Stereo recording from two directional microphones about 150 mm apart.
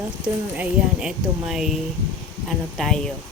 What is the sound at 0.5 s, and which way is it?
A woman's voice, 5° right (ahead or behind).